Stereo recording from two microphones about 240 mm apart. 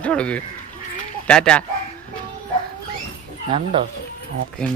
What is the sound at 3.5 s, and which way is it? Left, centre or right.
Speech, right.